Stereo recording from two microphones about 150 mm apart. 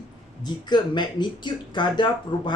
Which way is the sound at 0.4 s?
30° left (ahead or behind).